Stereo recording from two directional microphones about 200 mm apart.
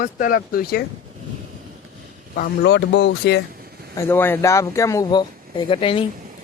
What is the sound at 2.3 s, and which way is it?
Speech, 50° left (ahead or behind).